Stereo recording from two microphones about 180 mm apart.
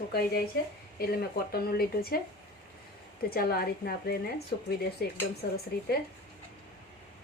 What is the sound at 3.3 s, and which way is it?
A woman's voice, 60° left (ahead or behind).